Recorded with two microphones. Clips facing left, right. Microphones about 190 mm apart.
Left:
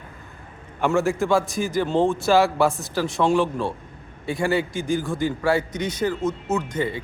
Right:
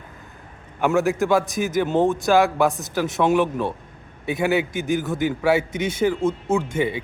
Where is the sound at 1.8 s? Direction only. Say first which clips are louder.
Right 1 dB; 20° right (ahead or behind).